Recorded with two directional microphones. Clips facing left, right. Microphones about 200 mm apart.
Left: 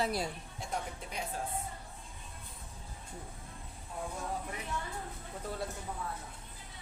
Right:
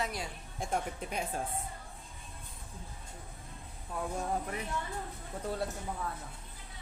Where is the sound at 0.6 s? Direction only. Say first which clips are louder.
Right 5 dB; 50° right (ahead or behind).